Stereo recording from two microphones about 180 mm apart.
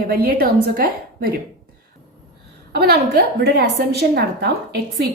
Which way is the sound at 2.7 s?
60° right (ahead or behind).